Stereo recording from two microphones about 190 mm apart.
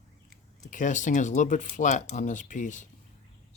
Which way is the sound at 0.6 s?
40° left (ahead or behind).